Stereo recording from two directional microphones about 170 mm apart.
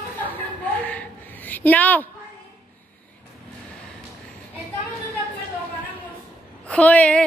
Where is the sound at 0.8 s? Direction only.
10° left (ahead or behind).